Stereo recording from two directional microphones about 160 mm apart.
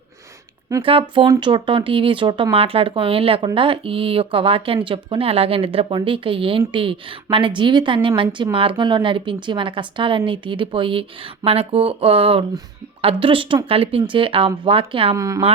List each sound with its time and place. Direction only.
0.8 s speech: 30° right (ahead or behind)
15.1 s speech: 20° right (ahead or behind)